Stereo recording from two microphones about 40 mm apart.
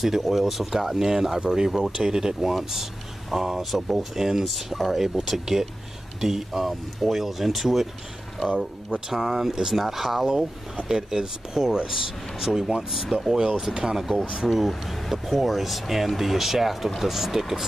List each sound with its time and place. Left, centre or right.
0.0 s speech: centre
8.9 s speech: centre
14.0 s speech: centre